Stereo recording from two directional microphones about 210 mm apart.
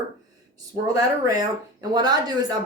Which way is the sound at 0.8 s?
15° right (ahead or behind).